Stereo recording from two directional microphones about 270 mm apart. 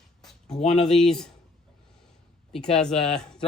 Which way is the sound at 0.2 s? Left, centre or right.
Centre.